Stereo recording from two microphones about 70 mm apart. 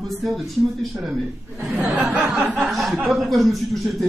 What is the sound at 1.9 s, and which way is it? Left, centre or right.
Speech, right.